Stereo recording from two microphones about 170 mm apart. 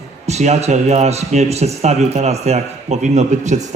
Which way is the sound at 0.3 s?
40° right (ahead or behind).